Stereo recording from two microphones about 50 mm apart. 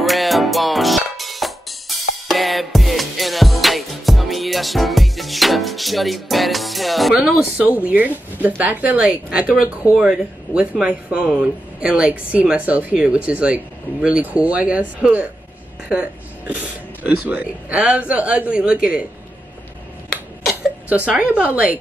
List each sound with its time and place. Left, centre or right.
0.0 s music: centre
7.2 s speech: right
9.1 s speech: right
20.9 s speech: right